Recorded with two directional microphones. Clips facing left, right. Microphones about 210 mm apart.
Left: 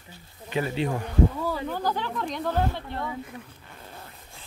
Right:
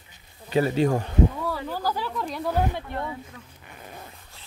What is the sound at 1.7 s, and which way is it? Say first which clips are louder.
Speech: even; 5° right (ahead or behind).